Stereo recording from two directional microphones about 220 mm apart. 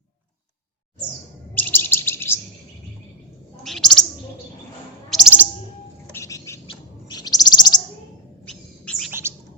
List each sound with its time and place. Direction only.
1.5 s chirp: 10° left (ahead or behind)
3.6 s bird: centre (ahead or behind)
5.0 s bird: centre (ahead or behind)
6.1 s bird: 15° left (ahead or behind)
8.4 s bird: 5° left (ahead or behind)